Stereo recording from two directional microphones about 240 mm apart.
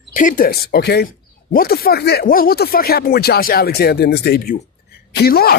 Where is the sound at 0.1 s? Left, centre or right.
Left.